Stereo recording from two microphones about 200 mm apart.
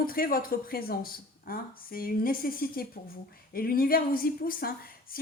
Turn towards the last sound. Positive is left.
turn(degrees=45)  # may be behind; listen again after turning